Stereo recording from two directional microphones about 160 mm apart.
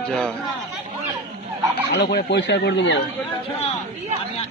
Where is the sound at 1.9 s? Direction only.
90° left.